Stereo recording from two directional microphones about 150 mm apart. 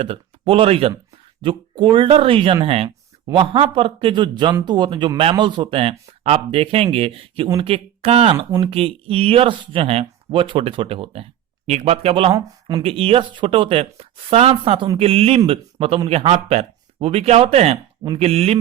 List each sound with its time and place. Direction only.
0.0 s speech: 40° right (ahead or behind)
8.4 s speech: 20° right (ahead or behind)
8.6 s speech: 40° right (ahead or behind)
12.3 s speech: 25° right (ahead or behind)
12.8 s speech: 40° right (ahead or behind)